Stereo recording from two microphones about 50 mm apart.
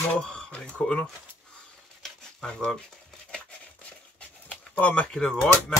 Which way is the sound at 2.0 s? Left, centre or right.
Centre.